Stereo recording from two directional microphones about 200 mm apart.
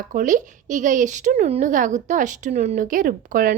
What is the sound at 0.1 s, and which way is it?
Speech, 40° right (ahead or behind).